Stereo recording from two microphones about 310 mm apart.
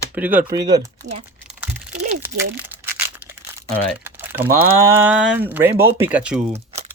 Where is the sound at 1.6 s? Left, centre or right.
Centre.